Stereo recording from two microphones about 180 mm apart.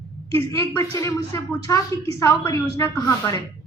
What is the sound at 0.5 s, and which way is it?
A man's voice, 15° left (ahead or behind).